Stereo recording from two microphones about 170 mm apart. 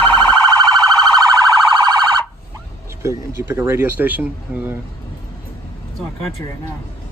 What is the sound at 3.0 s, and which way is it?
Speech, 15° right (ahead or behind).